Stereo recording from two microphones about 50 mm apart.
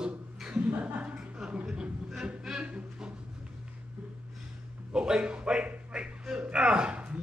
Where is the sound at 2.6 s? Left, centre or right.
Right.